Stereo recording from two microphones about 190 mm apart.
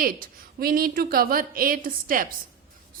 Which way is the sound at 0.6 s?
50° right (ahead or behind).